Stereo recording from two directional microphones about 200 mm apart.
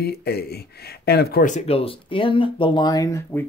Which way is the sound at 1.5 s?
30° left (ahead or behind).